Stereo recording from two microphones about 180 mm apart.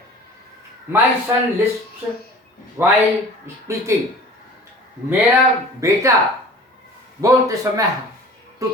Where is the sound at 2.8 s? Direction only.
15° right (ahead or behind).